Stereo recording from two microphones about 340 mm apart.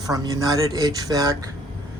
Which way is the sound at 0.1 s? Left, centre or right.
Centre.